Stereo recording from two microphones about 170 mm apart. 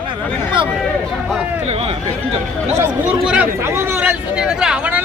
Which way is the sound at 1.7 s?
35° right (ahead or behind).